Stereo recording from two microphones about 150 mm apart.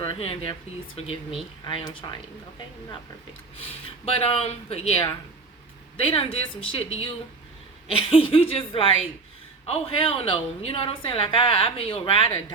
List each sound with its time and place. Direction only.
0.0 s a woman's voice: 40° left (ahead or behind)
4.0 s a woman's voice: 40° left (ahead or behind)
7.9 s a woman's voice: 35° left (ahead or behind)